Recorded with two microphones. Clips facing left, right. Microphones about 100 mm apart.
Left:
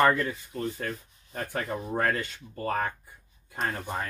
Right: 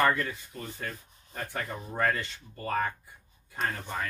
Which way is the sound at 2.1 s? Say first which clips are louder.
Left 3 dB; 45° left (ahead or behind).